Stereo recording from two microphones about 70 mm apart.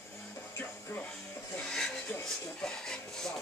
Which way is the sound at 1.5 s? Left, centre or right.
Centre.